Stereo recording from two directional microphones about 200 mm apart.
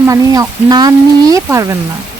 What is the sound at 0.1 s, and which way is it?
Speech, 20° right (ahead or behind).